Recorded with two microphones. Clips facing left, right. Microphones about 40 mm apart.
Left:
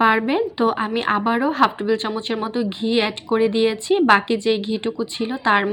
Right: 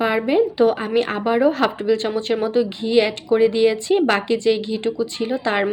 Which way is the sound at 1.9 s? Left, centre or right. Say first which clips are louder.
Right 2 dB; centre.